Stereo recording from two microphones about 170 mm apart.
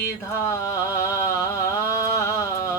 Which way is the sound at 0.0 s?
15° left (ahead or behind).